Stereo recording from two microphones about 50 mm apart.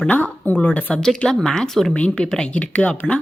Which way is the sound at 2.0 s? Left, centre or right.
Left.